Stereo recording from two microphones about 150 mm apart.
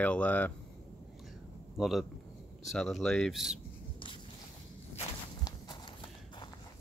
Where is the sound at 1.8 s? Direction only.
Centre (ahead or behind).